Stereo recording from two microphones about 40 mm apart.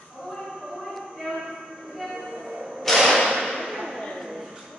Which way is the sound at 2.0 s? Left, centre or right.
Centre.